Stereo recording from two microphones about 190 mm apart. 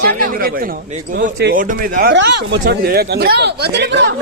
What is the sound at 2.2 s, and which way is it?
Speech, 60° right (ahead or behind).